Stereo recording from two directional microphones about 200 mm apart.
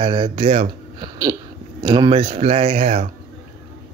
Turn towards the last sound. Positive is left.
turn(degrees=-35)  # may be behind; listen again after turning